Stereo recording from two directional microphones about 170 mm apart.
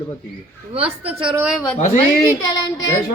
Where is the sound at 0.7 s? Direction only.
35° right (ahead or behind).